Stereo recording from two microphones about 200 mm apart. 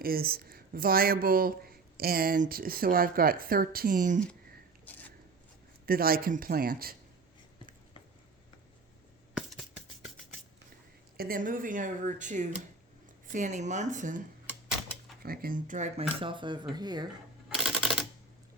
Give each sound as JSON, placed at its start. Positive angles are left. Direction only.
{"t": 0.0, "sound": "speech", "side_deg": -50}
{"t": 5.8, "sound": "speech", "side_deg": -45}
{"t": 9.3, "sound": "music", "side_deg": 0}
{"t": 11.2, "sound": "speech", "side_deg": -45}
{"t": 15.2, "sound": "speech", "side_deg": -50}
{"t": 17.5, "sound": "typewriter", "side_deg": -5}